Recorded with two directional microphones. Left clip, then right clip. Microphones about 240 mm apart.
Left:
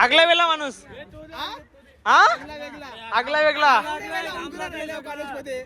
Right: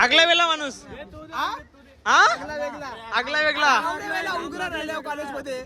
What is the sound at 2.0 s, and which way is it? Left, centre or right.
A man's voice, centre.